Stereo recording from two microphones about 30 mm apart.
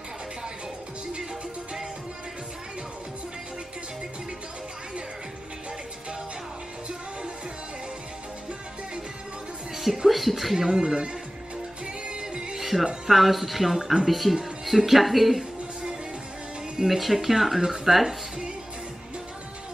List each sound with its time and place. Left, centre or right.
10.0 s speech: centre
10.7 s speech: right
11.8 s music: right
12.5 s music: centre
13.1 s speech: centre
16.7 s speech: centre